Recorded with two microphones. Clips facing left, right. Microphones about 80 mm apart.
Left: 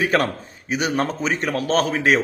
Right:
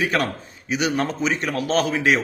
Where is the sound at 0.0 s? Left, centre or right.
Left.